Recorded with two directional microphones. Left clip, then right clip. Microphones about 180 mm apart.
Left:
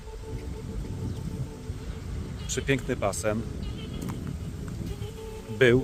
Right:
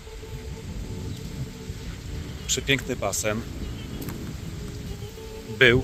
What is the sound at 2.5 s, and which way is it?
Speech, 5° left (ahead or behind).